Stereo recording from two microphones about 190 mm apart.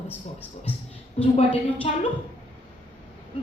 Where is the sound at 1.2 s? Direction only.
35° left (ahead or behind).